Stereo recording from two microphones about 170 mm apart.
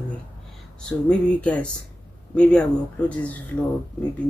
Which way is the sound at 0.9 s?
5° left (ahead or behind).